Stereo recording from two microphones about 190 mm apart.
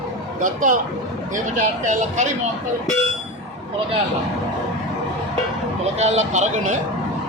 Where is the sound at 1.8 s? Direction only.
40° right (ahead or behind).